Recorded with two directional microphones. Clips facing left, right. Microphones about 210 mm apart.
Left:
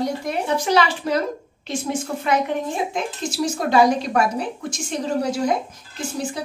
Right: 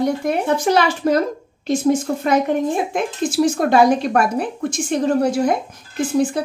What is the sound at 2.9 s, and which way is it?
Speech, 55° right (ahead or behind).